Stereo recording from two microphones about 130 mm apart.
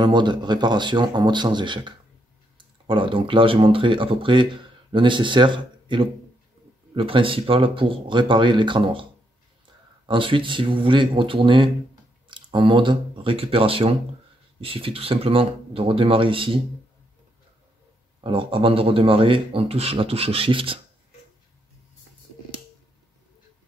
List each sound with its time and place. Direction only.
0.0 s speech: 35° right (ahead or behind)
10.0 s speech: 40° right (ahead or behind)
18.2 s speech: 40° right (ahead or behind)